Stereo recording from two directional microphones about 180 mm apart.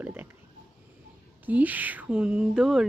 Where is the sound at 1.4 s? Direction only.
10° right (ahead or behind).